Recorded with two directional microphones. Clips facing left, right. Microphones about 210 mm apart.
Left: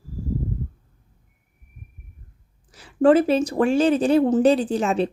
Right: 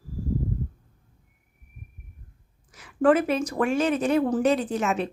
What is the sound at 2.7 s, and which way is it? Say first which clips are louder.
Speech: left 4 dB; 30° left (ahead or behind).